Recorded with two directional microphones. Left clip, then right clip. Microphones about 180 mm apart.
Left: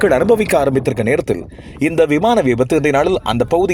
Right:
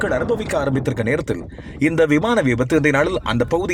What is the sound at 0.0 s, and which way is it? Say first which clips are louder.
Speech: left 8 dB; 45° left (ahead or behind).